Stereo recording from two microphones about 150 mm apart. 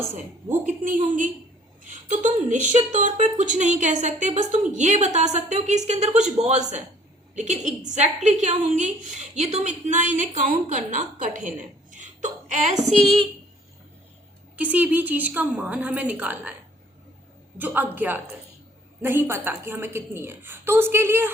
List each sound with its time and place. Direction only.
0.6 s a woman's voice: 60° right (ahead or behind)
14.5 s a woman's voice: 10° right (ahead or behind)
17.6 s a woman's voice: 10° right (ahead or behind)